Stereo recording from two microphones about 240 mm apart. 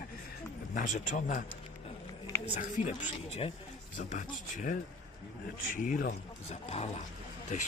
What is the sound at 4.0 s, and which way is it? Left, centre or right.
Speech, left.